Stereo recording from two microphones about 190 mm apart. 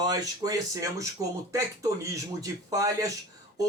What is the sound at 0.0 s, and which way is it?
A man's voice, 20° right (ahead or behind).